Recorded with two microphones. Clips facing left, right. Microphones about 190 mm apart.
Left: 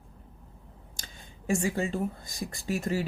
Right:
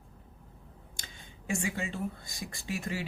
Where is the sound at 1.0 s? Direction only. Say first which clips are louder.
Left 7 dB; 40° left (ahead or behind).